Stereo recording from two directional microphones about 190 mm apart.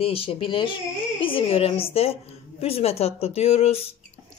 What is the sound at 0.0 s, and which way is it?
Speech, 30° left (ahead or behind).